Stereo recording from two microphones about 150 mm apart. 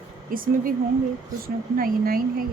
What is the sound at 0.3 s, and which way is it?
Speech, 70° right (ahead or behind).